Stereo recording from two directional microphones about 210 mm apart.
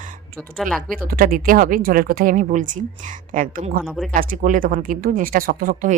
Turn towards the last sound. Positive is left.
turn(degrees=-40)  # may be behind; listen again after turning